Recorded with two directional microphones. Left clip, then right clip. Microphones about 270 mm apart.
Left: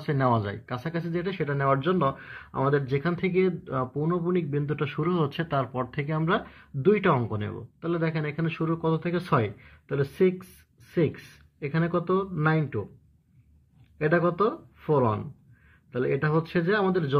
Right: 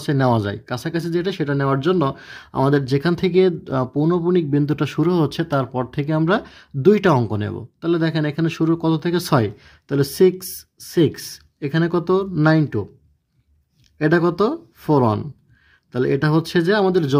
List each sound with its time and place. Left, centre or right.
0.0 s speech: right
11.6 s speech: right
13.9 s speech: right